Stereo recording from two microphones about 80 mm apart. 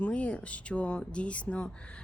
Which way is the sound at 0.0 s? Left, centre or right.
Centre.